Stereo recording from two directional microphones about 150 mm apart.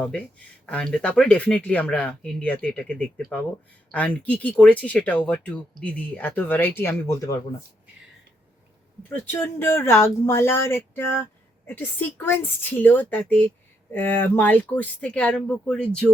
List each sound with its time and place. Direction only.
0.0 s speech: 10° left (ahead or behind)
9.3 s speech: 15° left (ahead or behind)